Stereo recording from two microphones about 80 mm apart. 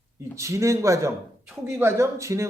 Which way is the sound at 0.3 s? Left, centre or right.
Right.